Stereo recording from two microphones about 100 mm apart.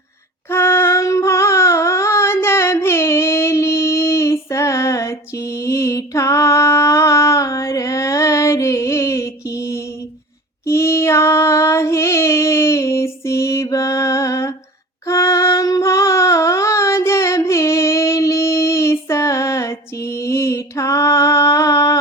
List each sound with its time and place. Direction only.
0.5 s child singing: 25° left (ahead or behind)
5.6 s mantra: 30° left (ahead or behind)
10.7 s child singing: 25° left (ahead or behind)
20.2 s mantra: 30° left (ahead or behind)